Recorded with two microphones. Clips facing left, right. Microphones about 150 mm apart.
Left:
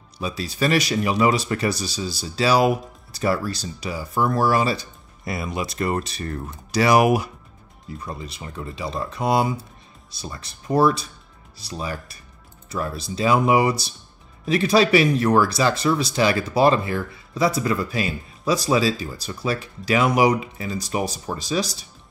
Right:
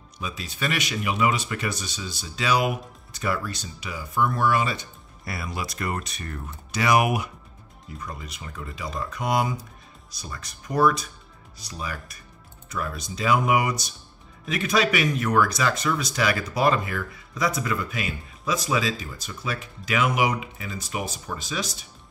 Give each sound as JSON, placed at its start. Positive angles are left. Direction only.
{"t": 0.2, "sound": "speech", "side_deg": 35}
{"t": 5.2, "sound": "speech", "side_deg": 20}